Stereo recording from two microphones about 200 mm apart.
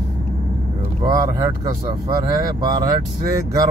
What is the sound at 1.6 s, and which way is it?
Speech, 20° right (ahead or behind).